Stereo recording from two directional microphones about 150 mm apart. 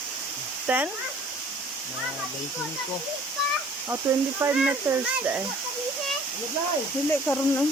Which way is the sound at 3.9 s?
15° right (ahead or behind).